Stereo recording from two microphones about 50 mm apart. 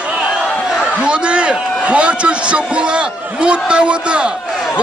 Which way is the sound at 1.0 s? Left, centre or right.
Right.